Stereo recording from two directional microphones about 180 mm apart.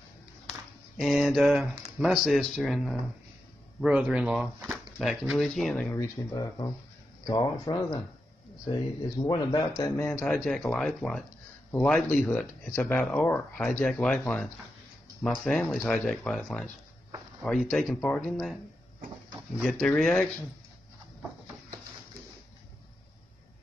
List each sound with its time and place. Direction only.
0.9 s speech: centre (ahead or behind)
5.9 s speech: 20° left (ahead or behind)
9.2 s speech: 20° left (ahead or behind); by 18.6 s 5° left (ahead or behind)
19.6 s speech: centre (ahead or behind)